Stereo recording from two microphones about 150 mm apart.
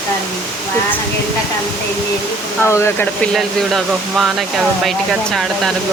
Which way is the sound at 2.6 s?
20° left (ahead or behind).